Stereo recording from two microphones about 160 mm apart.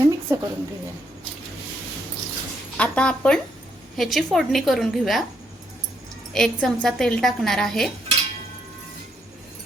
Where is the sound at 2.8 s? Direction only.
5° left (ahead or behind).